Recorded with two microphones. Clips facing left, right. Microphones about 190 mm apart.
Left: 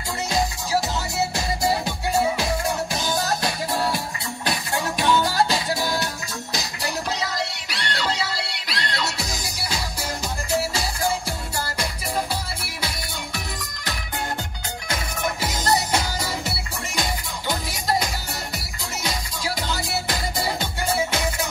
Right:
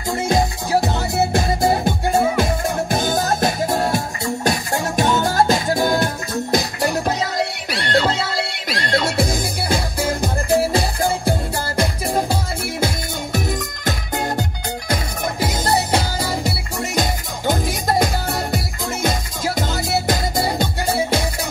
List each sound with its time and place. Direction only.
0.3 s music: 55° right (ahead or behind)
15.4 s music: 30° right (ahead or behind)
16.9 s music: 45° right (ahead or behind)